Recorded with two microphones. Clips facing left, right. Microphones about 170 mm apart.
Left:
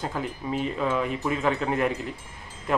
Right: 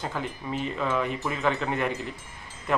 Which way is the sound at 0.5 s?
5° left (ahead or behind).